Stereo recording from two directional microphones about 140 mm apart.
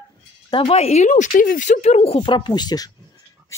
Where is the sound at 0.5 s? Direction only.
40° left (ahead or behind).